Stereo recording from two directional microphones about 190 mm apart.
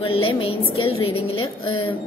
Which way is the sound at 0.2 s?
30° left (ahead or behind).